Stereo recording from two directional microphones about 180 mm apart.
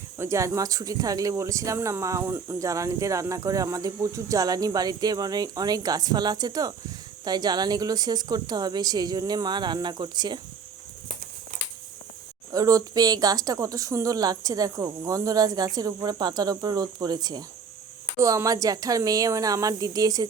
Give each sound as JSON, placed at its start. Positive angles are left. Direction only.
{"t": 0.2, "sound": "speech", "side_deg": -15}
{"t": 12.5, "sound": "speech", "side_deg": -20}